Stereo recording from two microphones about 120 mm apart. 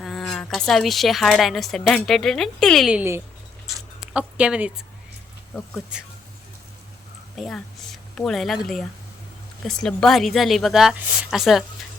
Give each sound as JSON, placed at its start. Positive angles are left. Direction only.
{"t": 0.0, "sound": "a woman's voice", "side_deg": 0}
{"t": 2.9, "sound": "speech", "side_deg": -20}
{"t": 5.5, "sound": "speech", "side_deg": 10}
{"t": 7.3, "sound": "a woman's voice", "side_deg": 0}